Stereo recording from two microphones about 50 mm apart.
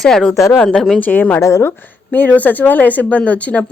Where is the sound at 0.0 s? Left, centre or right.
Centre.